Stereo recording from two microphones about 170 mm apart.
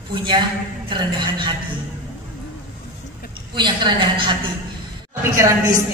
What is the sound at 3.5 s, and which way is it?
Speech, 30° right (ahead or behind).